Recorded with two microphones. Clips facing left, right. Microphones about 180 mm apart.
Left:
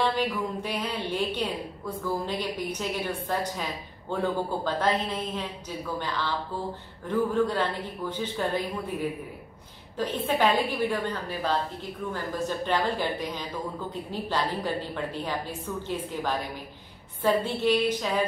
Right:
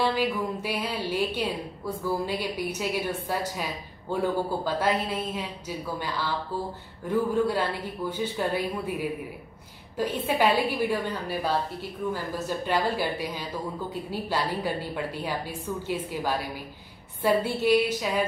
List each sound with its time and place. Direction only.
0.2 s a woman's voice: 10° right (ahead or behind)
9.9 s a woman's voice: 10° right (ahead or behind)